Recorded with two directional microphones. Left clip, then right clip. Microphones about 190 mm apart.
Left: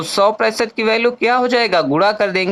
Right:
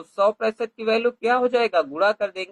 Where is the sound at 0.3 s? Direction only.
40° left (ahead or behind).